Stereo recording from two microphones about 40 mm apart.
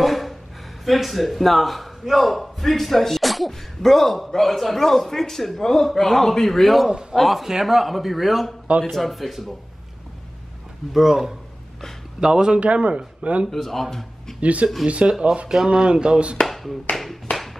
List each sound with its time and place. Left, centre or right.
0.0 s a sound: centre
0.8 s a man's voice: centre
6.9 s a man's voice: right
7.2 s a man's voice: centre
10.9 s speech: centre
12.5 s speech: right
13.5 s a man's voice: centre
14.4 s speech: right
15.0 s speech: centre
16.4 s speech: centre